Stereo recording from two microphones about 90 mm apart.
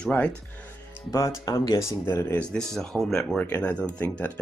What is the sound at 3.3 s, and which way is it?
Speech, 15° left (ahead or behind).